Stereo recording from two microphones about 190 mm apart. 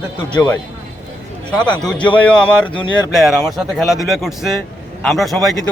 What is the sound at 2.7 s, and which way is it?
Speech, 25° left (ahead or behind).